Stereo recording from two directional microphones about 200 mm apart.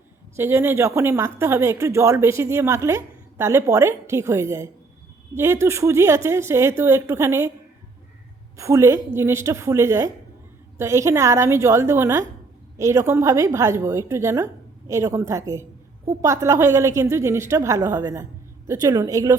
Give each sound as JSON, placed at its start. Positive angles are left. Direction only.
{"t": 0.3, "sound": "speech", "side_deg": -10}
{"t": 8.5, "sound": "speech", "side_deg": -15}